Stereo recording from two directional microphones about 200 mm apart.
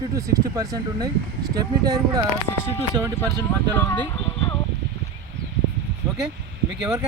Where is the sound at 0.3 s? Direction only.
20° right (ahead or behind).